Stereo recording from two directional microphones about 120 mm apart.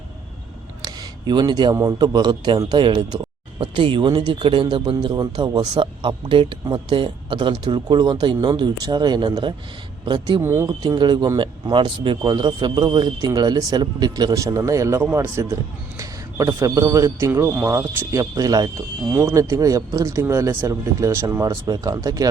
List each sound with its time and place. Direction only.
0.8 s a sound: 35° right (ahead or behind)
1.7 s a man's voice: 25° right (ahead or behind)
10.4 s speech: 20° right (ahead or behind)
10.7 s a man's voice: 35° right (ahead or behind)